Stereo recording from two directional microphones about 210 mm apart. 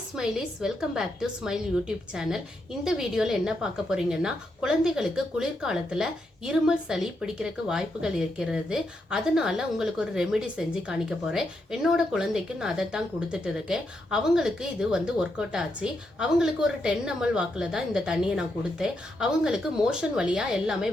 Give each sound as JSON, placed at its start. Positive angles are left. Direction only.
{"t": 0.2, "sound": "a woman's voice", "side_deg": -5}